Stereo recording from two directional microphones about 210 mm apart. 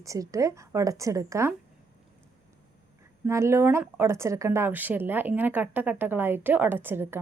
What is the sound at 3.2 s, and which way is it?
A woman's voice, 15° right (ahead or behind).